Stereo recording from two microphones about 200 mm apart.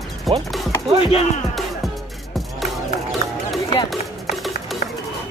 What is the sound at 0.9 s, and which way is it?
Speech, 25° left (ahead or behind).